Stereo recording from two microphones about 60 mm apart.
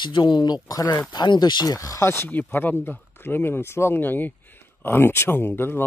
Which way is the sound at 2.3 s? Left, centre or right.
Left.